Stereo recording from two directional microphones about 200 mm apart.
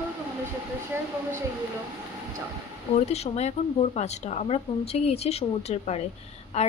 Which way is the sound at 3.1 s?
30° left (ahead or behind).